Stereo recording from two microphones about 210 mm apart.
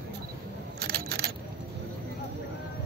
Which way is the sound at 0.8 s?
50° right (ahead or behind).